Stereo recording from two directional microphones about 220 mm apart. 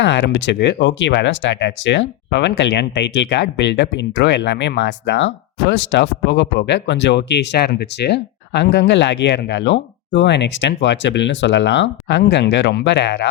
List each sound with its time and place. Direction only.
0.0 s speech: 55° left (ahead or behind)